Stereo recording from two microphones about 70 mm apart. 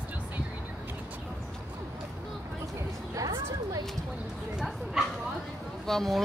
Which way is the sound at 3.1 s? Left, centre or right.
Right.